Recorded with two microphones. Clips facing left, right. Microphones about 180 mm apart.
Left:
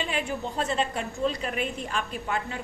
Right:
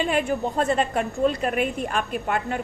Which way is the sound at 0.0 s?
50° right (ahead or behind).